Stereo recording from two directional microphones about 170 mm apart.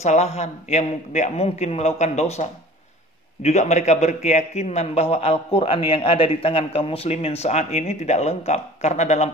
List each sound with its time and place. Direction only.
0.0 s a man's voice: 40° left (ahead or behind)
3.4 s a man's voice: 40° left (ahead or behind)